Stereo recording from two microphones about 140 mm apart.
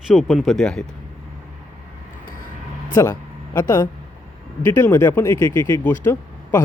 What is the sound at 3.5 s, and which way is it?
A man's voice, 20° left (ahead or behind).